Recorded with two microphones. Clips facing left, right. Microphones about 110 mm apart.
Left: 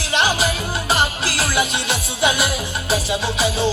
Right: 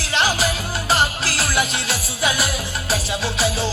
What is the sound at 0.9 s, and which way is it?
Music, 15° left (ahead or behind).